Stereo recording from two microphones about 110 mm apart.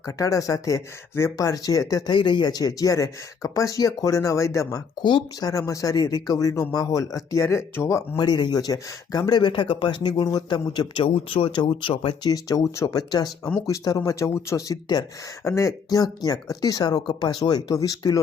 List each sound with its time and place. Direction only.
0.0 s speech: 30° left (ahead or behind)
2.1 s speech: 45° left (ahead or behind); by 4.8 s 25° left (ahead or behind)
5.0 s speech: 40° left (ahead or behind)
8.1 s speech: 40° left (ahead or behind)
10.7 s speech: 50° left (ahead or behind)
12.3 s speech: 35° left (ahead or behind)